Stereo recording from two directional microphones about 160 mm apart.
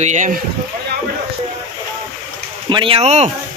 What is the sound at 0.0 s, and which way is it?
Speech, 50° right (ahead or behind).